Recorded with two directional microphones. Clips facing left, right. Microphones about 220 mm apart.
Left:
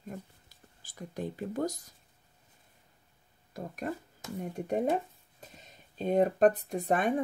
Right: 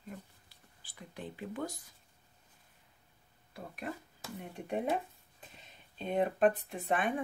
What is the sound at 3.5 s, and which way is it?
Speech, 40° left (ahead or behind).